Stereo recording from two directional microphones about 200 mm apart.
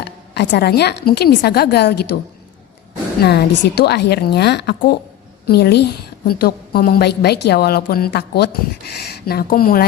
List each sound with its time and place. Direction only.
0.0 s a woman's voice: 55° left (ahead or behind)
3.2 s a woman's voice: 55° left (ahead or behind)